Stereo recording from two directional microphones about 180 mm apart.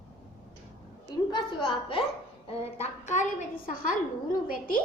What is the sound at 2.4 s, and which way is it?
A woman's voice, 40° left (ahead or behind).